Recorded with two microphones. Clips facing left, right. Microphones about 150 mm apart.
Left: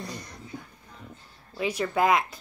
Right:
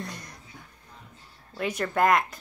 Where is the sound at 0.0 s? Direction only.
Centre (ahead or behind).